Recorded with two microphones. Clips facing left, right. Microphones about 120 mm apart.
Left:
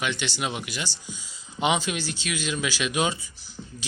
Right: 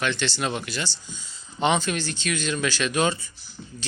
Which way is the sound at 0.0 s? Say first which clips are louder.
Right 3 dB; 10° left (ahead or behind).